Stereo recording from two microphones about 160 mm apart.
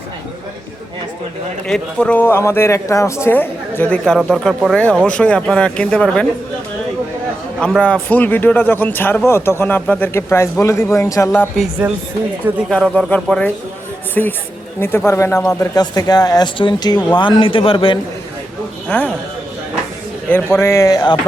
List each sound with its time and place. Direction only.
1.6 s a man's voice: 5° left (ahead or behind)
7.6 s a man's voice: 5° left (ahead or behind)
11.8 s speech: 10° right (ahead or behind)
12.7 s a man's voice: 5° left (ahead or behind); by 18.0 s 35° left (ahead or behind)
18.9 s a man's voice: 10° left (ahead or behind)
20.3 s speech: 15° left (ahead or behind)